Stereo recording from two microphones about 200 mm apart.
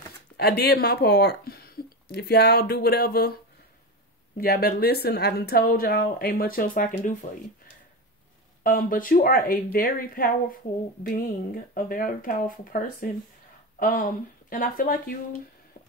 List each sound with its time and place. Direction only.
0.4 s speech: 55° left (ahead or behind)
4.4 s speech: 50° left (ahead or behind)
8.6 s speech: 45° left (ahead or behind)